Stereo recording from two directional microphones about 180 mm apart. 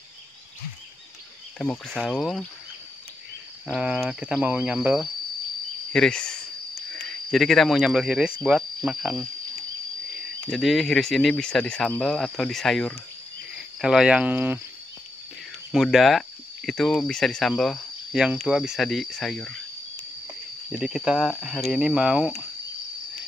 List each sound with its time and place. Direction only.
1.6 s speech: 5° left (ahead or behind)
3.6 s speech: 5° right (ahead or behind)
10.4 s speech: centre (ahead or behind)
13.7 s cricket: 5° right (ahead or behind)
15.7 s speech: centre (ahead or behind)
20.7 s speech: 5° right (ahead or behind)